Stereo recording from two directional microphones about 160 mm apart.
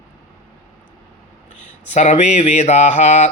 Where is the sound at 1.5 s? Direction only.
50° left (ahead or behind).